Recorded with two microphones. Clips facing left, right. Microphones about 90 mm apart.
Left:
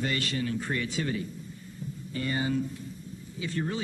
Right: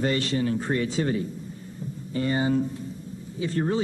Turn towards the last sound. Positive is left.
turn(degrees=-35)  # may be behind; listen again after turning